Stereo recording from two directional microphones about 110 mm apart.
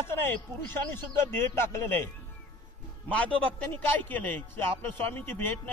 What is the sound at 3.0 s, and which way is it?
A man's voice, 10° left (ahead or behind).